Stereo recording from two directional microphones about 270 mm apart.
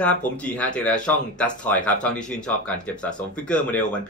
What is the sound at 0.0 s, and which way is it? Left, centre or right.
Speech, centre.